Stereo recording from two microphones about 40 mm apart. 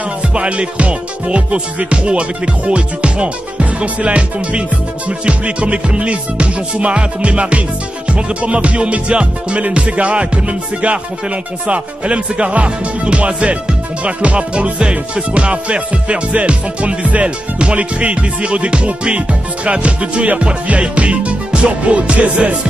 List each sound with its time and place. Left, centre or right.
0.2 s music: right